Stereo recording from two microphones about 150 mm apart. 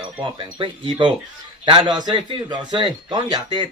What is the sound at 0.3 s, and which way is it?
A man's voice, 35° right (ahead or behind).